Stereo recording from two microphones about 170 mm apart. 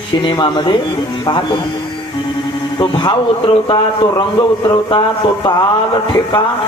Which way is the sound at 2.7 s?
30° left (ahead or behind).